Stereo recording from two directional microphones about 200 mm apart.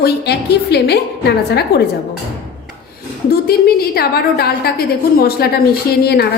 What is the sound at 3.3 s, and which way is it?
A woman's voice, 50° left (ahead or behind).